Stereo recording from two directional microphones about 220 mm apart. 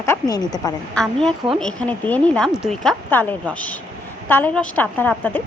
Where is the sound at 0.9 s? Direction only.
5° left (ahead or behind).